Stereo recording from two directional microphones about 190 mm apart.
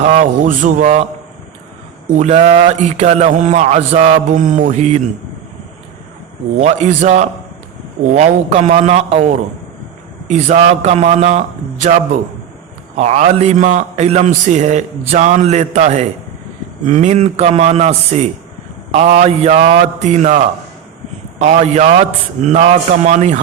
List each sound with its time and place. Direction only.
0.0 s a man's voice: 40° right (ahead or behind)
2.1 s a man's voice: 35° right (ahead or behind)
6.6 s a man's voice: 40° right (ahead or behind)